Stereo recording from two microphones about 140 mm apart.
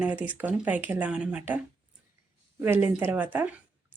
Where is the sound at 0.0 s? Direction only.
10° right (ahead or behind).